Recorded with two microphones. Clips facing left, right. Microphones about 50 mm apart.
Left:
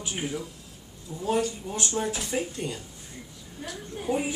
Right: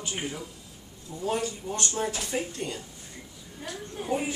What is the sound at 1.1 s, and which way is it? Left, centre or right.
Speech, left.